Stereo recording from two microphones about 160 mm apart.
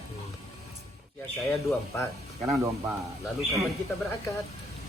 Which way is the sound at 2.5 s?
20° right (ahead or behind).